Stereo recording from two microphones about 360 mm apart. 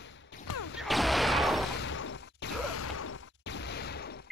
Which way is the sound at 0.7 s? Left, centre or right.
Centre.